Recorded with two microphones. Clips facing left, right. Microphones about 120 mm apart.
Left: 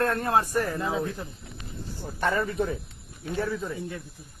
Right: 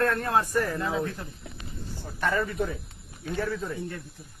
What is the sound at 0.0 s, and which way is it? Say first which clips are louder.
Speech: left 1 dB; 25° left (ahead or behind).